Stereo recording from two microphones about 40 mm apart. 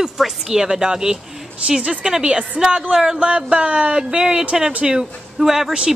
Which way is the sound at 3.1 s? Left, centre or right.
Right.